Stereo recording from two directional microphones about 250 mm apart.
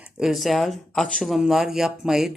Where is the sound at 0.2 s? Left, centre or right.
Centre.